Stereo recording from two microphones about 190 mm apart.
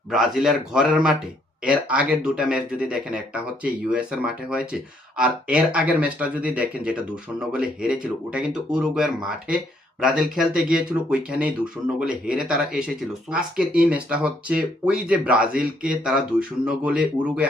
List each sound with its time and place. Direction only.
0.1 s speech: 5° right (ahead or behind)